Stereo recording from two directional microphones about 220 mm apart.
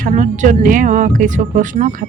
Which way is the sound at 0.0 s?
35° right (ahead or behind).